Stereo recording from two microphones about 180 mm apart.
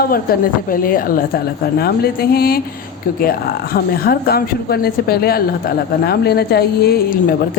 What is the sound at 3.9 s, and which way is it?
A woman's voice, 55° left (ahead or behind).